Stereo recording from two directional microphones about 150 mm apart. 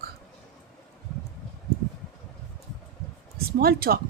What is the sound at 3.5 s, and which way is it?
Speech, 85° right.